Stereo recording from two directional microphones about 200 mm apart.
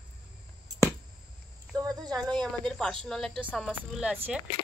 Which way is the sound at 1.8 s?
20° right (ahead or behind).